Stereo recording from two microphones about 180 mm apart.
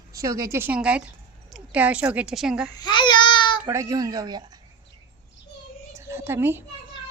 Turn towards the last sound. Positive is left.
turn(degrees=-10)  # may be behind; listen again after turning